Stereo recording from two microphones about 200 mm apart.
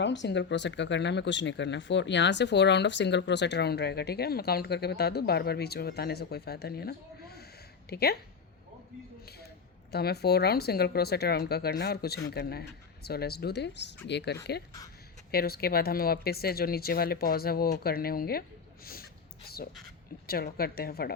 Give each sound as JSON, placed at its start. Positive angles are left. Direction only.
{"t": 0.0, "sound": "a woman's voice", "side_deg": 60}
{"t": 9.9, "sound": "a woman's voice", "side_deg": 55}
{"t": 19.5, "sound": "a sound", "side_deg": 50}
{"t": 20.2, "sound": "a woman's voice", "side_deg": 50}